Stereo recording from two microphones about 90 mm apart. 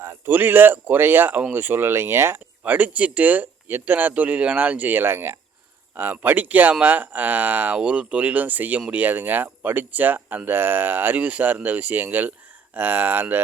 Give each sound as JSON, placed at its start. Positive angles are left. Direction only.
{"t": 0.0, "sound": "speech", "side_deg": -25}